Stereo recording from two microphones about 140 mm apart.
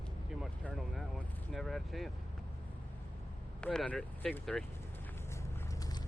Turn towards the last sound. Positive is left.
turn(degrees=5)  # may be behind; listen again after turning